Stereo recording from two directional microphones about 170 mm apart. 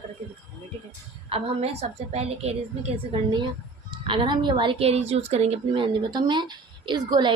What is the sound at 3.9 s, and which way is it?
A woman's voice, 30° right (ahead or behind).